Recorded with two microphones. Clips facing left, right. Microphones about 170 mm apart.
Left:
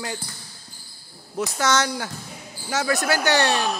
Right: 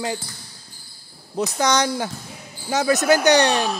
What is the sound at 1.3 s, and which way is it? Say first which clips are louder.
Speech: right 2 dB; 20° right (ahead or behind).